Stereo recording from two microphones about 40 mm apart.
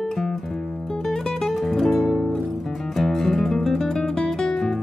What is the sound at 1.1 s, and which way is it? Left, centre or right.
Music, centre.